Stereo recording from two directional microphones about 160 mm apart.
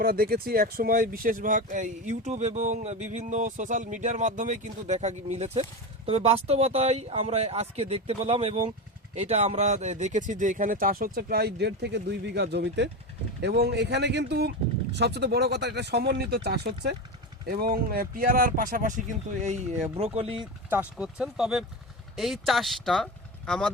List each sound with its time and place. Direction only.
0.0 s speech: 70° right (ahead or behind)
17.5 s speech: 65° right (ahead or behind); by 20.4 s 35° right (ahead or behind)
20.4 s speech: 10° right (ahead or behind)